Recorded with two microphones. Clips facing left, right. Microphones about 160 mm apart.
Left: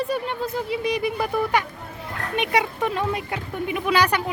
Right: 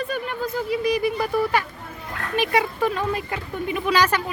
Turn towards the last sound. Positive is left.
turn(degrees=15)  # may be behind; listen again after turning